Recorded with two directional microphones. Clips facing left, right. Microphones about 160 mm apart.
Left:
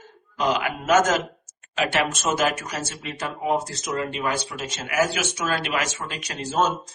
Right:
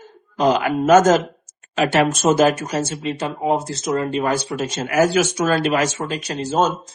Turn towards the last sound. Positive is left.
turn(degrees=-35)  # may be behind; listen again after turning